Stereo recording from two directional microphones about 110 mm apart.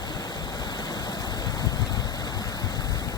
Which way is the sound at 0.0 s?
40° left (ahead or behind).